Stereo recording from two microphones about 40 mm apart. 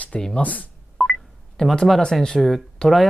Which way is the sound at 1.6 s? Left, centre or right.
Centre.